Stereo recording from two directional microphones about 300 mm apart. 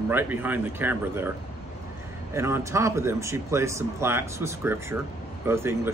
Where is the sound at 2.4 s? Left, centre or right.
Centre.